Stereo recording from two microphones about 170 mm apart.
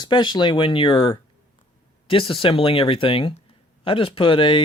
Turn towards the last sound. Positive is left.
turn(degrees=30)  # may be behind; listen again after turning